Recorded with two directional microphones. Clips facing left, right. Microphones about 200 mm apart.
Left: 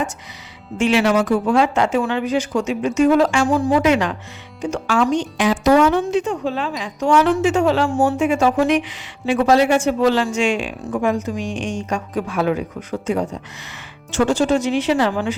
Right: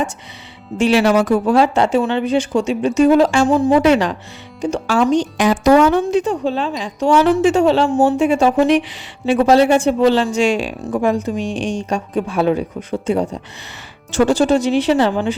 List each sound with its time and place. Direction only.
0.8 s a woman's voice: 35° right (ahead or behind)
3.8 s a woman's voice: 35° right (ahead or behind)